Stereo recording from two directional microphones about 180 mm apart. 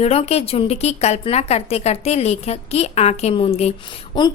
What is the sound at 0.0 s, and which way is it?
A woman's voice, 35° left (ahead or behind).